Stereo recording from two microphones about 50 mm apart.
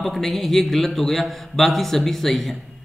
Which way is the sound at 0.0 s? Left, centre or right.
Centre.